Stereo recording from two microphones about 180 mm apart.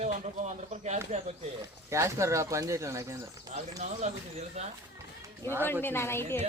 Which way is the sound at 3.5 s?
40° right (ahead or behind).